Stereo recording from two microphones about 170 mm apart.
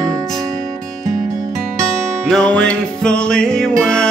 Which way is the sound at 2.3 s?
5° left (ahead or behind).